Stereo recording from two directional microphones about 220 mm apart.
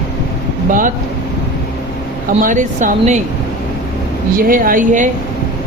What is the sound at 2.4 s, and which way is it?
Speech, 35° right (ahead or behind).